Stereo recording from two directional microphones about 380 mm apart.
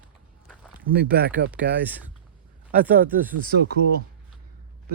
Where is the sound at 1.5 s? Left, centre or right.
Centre.